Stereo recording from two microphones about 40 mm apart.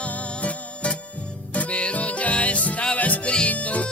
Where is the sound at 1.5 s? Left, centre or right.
Left.